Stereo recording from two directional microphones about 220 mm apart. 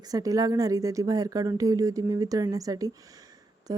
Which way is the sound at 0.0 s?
15° right (ahead or behind).